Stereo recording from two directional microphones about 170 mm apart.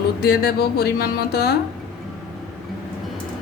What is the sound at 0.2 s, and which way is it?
Speech, 65° left (ahead or behind).